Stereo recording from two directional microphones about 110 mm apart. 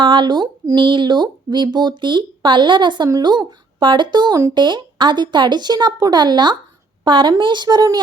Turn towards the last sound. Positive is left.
turn(degrees=-35)  # may be behind; listen again after turning